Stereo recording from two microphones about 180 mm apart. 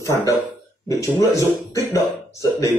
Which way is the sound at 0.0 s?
15° left (ahead or behind).